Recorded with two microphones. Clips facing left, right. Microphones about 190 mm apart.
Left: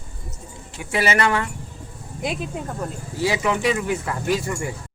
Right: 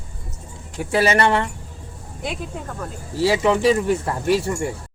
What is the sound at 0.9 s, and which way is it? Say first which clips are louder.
Speech: right 3 dB; 35° right (ahead or behind).